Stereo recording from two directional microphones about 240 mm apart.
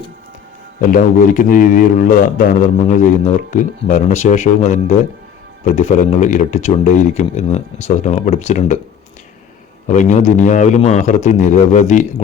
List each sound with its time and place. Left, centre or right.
0.8 s a man's voice: left
9.8 s a man's voice: left